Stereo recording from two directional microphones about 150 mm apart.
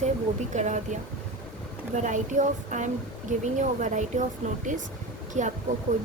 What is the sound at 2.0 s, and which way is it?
A woman's voice, 55° right (ahead or behind).